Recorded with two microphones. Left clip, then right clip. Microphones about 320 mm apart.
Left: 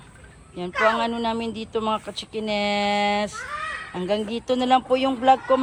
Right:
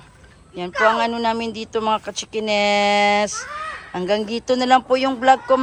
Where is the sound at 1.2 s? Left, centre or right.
Centre.